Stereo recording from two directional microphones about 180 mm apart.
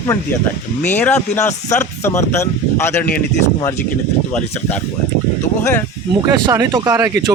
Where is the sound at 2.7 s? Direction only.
10° left (ahead or behind).